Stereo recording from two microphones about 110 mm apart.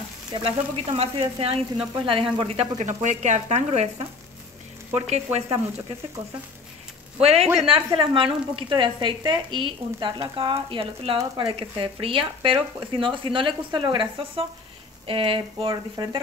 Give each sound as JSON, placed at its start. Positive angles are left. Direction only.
{"t": 0.3, "sound": "speech", "side_deg": -60}
{"t": 7.2, "sound": "speech", "side_deg": -70}
{"t": 8.0, "sound": "a woman's voice", "side_deg": -55}
{"t": 15.7, "sound": "speech", "side_deg": -40}